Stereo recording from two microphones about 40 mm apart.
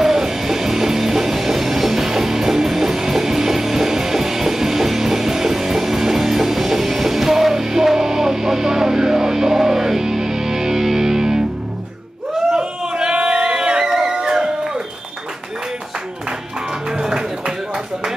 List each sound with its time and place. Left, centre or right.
0.0 s music: centre
12.4 s music: centre
16.9 s music: centre